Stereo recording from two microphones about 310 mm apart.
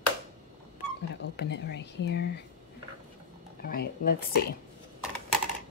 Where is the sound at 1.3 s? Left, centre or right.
Left.